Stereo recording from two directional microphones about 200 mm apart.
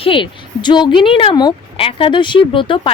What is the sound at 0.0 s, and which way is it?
Speech, 25° left (ahead or behind).